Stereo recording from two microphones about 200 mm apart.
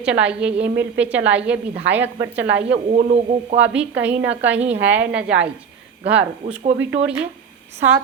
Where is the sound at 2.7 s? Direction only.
35° right (ahead or behind).